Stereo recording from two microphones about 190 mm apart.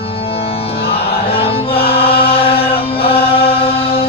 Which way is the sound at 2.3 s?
30° left (ahead or behind).